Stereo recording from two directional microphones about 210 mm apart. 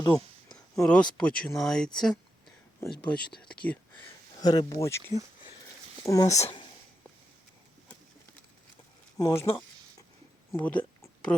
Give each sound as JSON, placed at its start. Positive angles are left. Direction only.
{"t": 0.0, "sound": "a sound", "side_deg": 20}
{"t": 0.8, "sound": "speech", "side_deg": 5}
{"t": 3.0, "sound": "speech", "side_deg": 5}
{"t": 4.4, "sound": "speech", "side_deg": 20}
{"t": 9.1, "sound": "speech", "side_deg": 15}
{"t": 10.5, "sound": "a sound", "side_deg": 5}